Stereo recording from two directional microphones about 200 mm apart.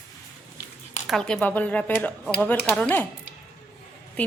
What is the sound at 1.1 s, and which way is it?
Speech, 5° left (ahead or behind).